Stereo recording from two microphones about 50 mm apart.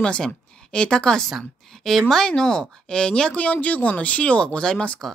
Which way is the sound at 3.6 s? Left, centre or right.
Left.